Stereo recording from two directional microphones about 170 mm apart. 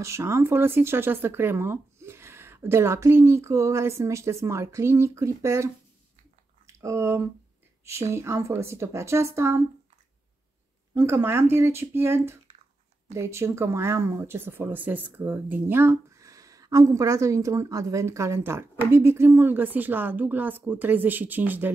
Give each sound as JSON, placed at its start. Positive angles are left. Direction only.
{"t": 0.0, "sound": "speech", "side_deg": -15}
{"t": 6.8, "sound": "speech", "side_deg": -15}
{"t": 11.0, "sound": "speech", "side_deg": -15}